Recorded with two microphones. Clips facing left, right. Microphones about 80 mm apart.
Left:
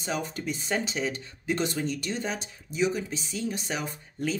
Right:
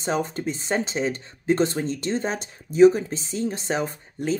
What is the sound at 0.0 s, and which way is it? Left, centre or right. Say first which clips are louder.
Speech: right 6 dB; right.